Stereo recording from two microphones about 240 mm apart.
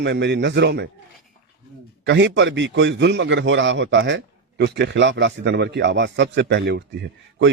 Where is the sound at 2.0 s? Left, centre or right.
Right.